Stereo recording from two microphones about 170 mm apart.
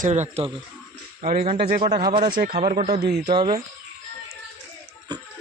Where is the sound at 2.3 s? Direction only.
60° right (ahead or behind).